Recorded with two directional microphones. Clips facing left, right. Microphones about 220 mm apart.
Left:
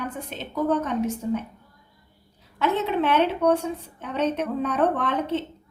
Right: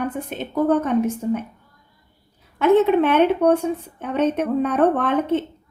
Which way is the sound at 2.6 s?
55° right (ahead or behind).